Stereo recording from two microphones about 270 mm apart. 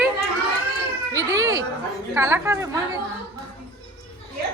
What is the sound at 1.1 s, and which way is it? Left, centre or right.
A woman's voice, centre.